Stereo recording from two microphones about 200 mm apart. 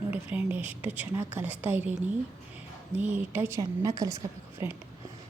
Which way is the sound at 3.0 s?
10° right (ahead or behind).